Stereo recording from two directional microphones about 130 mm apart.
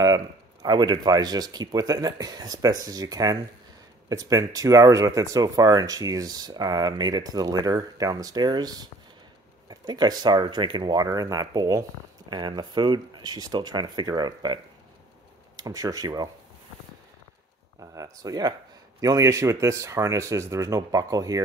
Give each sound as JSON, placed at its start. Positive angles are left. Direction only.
{"t": 0.0, "sound": "speech", "side_deg": -30}
{"t": 17.7, "sound": "speech", "side_deg": -25}